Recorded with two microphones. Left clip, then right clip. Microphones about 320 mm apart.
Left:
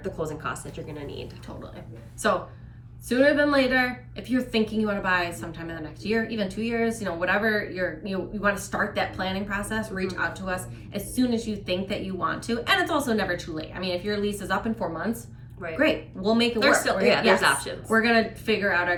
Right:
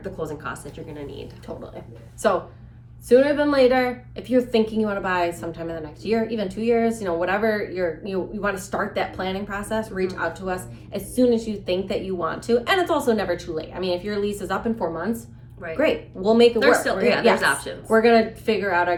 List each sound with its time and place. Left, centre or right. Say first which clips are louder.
0.0 s speech: right 1 dB; centre
3.1 s a woman's voice: right 3 dB; centre
16.6 s speech: right 3 dB; centre
18.0 s a woman's voice: right 5 dB; centre